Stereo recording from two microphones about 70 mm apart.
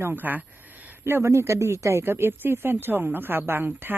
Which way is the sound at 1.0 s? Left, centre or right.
Right.